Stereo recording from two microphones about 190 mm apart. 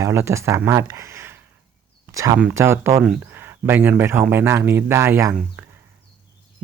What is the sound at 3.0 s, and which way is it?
Speech, centre (ahead or behind).